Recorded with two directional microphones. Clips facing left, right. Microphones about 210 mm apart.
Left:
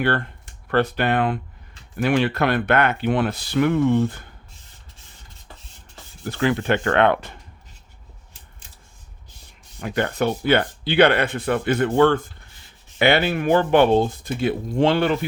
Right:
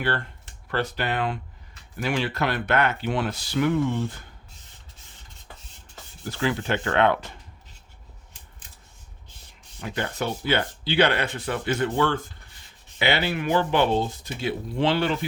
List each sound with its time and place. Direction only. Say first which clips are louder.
0.0 s speech: left 5 dB; 55° left (ahead or behind)
6.2 s speech: left 5 dB; 60° left (ahead or behind)
9.8 s speech: left 6 dB; 60° left (ahead or behind)